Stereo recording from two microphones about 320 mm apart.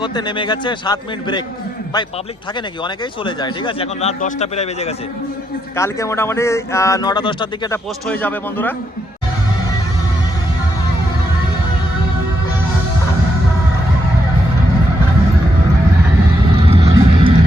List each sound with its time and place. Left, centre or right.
0.0 s speech: centre
2.8 s a man's voice: centre
5.7 s speech: centre
16.6 s music: centre